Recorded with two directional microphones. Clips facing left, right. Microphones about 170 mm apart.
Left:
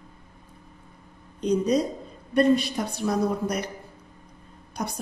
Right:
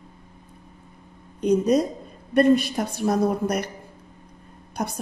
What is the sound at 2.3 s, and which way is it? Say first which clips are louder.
A man's voice: right 3 dB; 55° right (ahead or behind).